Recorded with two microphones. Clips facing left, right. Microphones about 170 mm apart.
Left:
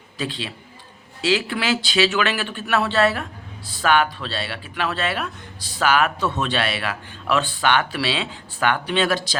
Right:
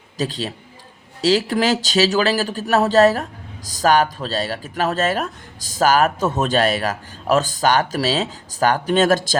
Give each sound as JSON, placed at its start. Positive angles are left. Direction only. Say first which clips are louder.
{"t": 0.2, "sound": "speech", "louder": "right 4 dB", "side_deg": -40}